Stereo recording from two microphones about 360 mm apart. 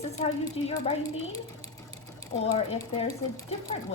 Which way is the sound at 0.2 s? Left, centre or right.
Centre.